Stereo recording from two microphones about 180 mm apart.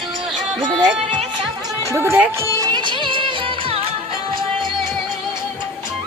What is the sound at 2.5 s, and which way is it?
Music, 20° right (ahead or behind).